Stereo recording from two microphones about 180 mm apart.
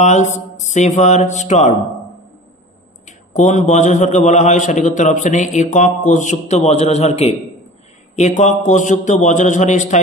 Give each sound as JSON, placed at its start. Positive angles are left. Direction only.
{"t": 0.0, "sound": "a man's voice", "side_deg": 40}
{"t": 3.1, "sound": "a man's voice", "side_deg": 45}